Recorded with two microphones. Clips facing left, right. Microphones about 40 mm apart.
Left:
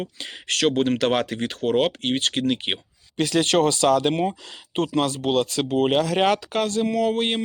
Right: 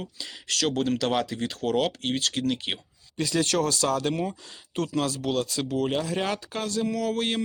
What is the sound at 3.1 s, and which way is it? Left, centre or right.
Speech, left.